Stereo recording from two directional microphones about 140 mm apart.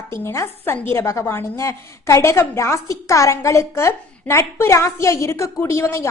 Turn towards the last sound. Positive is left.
turn(degrees=20)  # may be behind; listen again after turning